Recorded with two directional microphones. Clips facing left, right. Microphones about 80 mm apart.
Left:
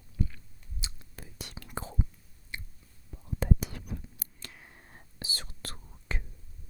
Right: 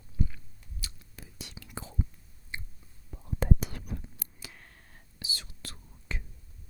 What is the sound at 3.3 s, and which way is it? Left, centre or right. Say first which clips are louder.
Whispering: right 1 dB; right.